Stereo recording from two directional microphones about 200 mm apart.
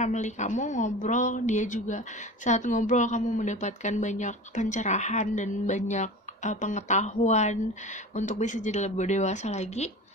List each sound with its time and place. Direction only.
0.0 s a woman's voice: 35° left (ahead or behind)